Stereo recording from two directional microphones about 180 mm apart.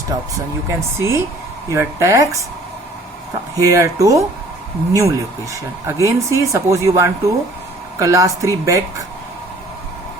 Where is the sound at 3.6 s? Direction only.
15° right (ahead or behind).